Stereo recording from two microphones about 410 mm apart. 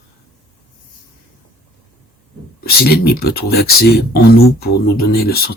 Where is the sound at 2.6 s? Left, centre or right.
Left.